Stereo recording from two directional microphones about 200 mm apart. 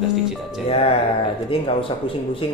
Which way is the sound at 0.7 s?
30° left (ahead or behind).